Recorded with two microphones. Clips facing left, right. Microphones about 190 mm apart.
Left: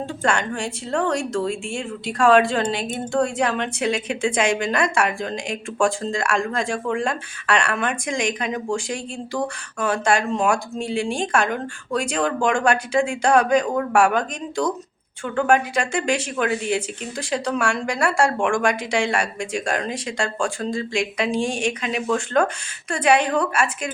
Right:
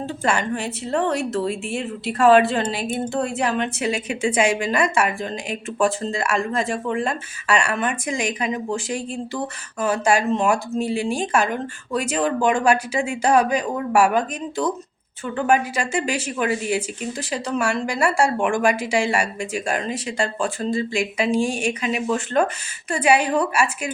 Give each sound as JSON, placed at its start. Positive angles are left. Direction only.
{"t": 0.2, "sound": "a woman's voice", "side_deg": -5}